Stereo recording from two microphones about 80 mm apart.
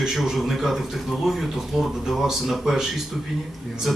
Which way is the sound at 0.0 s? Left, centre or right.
Centre.